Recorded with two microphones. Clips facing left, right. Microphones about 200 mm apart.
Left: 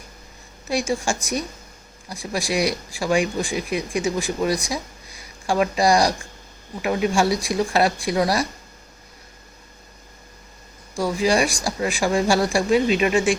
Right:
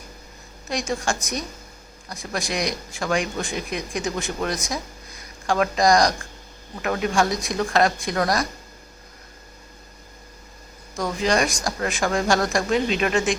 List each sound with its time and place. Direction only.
0.7 s speech: 10° left (ahead or behind)
2.3 s speech: 5° left (ahead or behind)
10.9 s speech: 5° left (ahead or behind)